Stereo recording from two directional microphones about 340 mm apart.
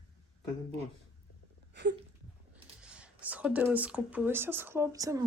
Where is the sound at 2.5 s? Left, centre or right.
Centre.